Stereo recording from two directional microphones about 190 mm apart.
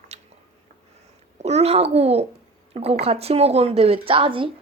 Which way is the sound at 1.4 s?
35° right (ahead or behind).